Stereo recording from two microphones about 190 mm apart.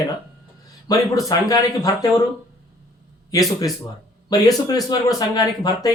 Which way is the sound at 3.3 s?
20° left (ahead or behind).